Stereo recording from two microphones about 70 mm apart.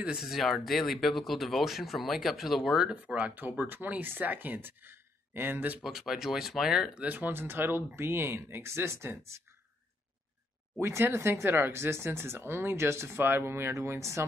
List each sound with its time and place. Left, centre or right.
0.2 s speech: centre
2.9 s speech: centre
5.9 s speech: centre
7.0 s speech: right
10.8 s speech: right